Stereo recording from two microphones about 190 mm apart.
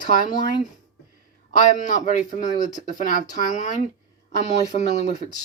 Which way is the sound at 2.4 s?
20° left (ahead or behind).